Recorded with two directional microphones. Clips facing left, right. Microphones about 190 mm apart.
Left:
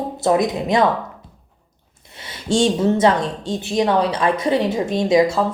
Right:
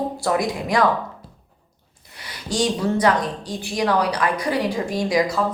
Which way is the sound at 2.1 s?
25° left (ahead or behind).